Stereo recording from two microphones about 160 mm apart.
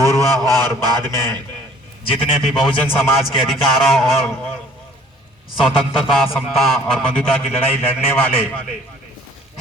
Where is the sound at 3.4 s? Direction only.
Centre (ahead or behind).